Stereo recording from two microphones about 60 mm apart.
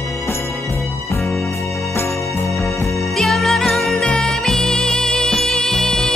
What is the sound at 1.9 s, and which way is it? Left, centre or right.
Music, left.